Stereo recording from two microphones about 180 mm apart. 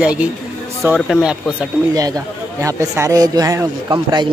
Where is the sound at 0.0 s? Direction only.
5° right (ahead or behind).